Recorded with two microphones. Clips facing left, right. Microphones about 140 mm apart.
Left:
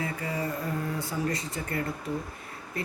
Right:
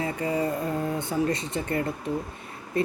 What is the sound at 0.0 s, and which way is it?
Speech, 25° right (ahead or behind).